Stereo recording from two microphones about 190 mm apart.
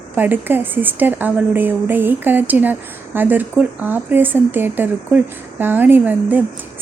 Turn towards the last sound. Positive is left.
turn(degrees=-10)  # may be behind; listen again after turning